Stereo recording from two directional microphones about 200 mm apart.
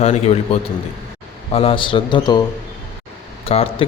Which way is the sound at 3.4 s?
30° left (ahead or behind).